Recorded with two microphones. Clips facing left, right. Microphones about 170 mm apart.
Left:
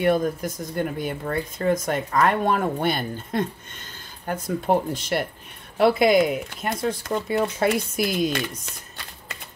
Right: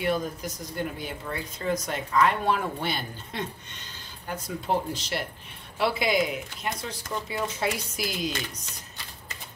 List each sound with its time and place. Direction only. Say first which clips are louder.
0.0 s speech: left 7 dB; 50° left (ahead or behind)